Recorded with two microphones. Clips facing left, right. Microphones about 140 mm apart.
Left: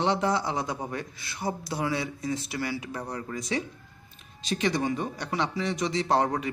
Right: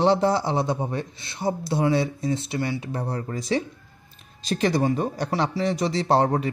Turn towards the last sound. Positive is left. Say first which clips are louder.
# right 4 dB
turn(degrees=-30)  # may be behind; listen again after turning